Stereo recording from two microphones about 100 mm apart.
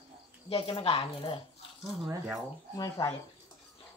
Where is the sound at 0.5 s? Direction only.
75° left (ahead or behind).